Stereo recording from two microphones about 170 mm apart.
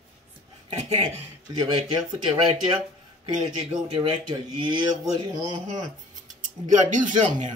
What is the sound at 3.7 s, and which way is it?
Speech, 25° right (ahead or behind).